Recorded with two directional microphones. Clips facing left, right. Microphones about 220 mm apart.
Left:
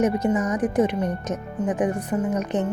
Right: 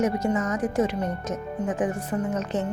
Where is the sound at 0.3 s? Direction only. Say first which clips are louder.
Left 3 dB; 15° left (ahead or behind).